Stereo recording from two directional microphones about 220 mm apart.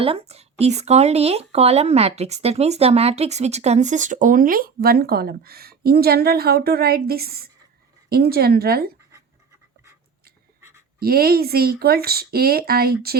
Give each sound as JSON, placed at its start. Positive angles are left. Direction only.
{"t": 0.0, "sound": "speech", "side_deg": -25}
{"t": 11.0, "sound": "speech", "side_deg": -45}